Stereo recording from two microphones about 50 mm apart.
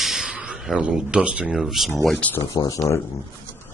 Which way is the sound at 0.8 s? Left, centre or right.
Centre.